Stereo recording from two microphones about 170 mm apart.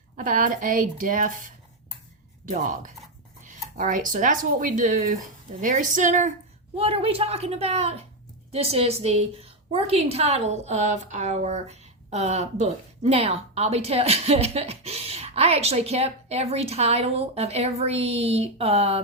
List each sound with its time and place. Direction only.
0.2 s speech: 55° right (ahead or behind)
6.7 s a woman's voice: 35° right (ahead or behind)